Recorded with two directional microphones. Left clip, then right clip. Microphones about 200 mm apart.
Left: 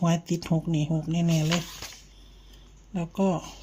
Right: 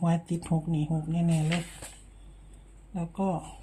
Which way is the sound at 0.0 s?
25° left (ahead or behind).